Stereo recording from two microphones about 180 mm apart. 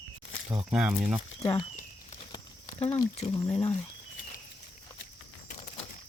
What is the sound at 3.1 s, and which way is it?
Speech, 35° left (ahead or behind).